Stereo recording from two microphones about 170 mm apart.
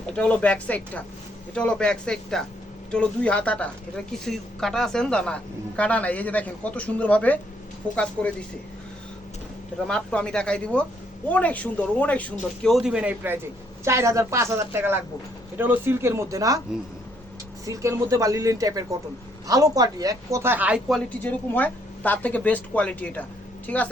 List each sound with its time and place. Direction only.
0.0 s a woman's voice: 5° left (ahead or behind)
9.8 s a woman's voice: 5° left (ahead or behind)
12.6 s a woman's voice: centre (ahead or behind); by 16.6 s 20° right (ahead or behind)
17.7 s a woman's voice: 20° right (ahead or behind)
21.2 s a woman's voice: 10° left (ahead or behind)